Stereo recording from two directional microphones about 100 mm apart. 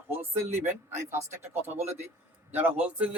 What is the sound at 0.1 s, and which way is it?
A man's voice, 20° right (ahead or behind).